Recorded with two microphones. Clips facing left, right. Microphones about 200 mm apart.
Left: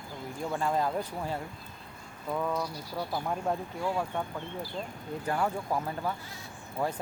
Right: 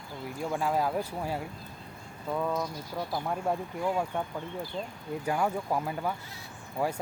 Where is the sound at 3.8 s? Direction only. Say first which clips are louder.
Right 2 dB; 15° right (ahead or behind).